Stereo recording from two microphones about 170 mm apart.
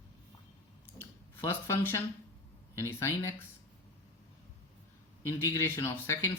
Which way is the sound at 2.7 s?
15° left (ahead or behind).